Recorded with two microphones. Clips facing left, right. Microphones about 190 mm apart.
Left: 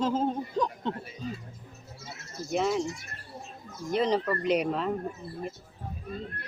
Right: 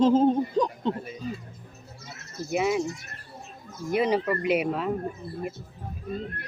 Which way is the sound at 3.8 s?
10° right (ahead or behind).